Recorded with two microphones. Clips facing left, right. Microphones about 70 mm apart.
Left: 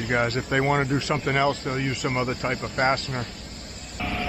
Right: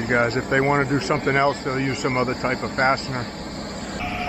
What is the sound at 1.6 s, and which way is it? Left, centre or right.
Speech, right.